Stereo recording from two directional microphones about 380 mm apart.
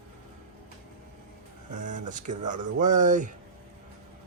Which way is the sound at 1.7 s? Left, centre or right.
Centre.